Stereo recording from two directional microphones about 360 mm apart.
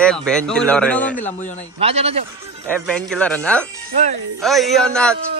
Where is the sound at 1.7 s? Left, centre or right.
Centre.